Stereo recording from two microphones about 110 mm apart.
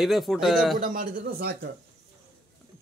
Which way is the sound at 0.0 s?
Centre (ahead or behind).